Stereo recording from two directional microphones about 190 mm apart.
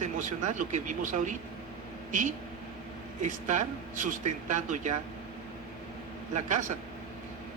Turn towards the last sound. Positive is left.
turn(degrees=-40)  # may be behind; listen again after turning